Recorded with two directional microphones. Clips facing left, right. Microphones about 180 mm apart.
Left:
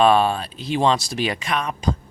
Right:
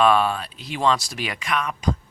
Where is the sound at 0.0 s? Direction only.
30° left (ahead or behind).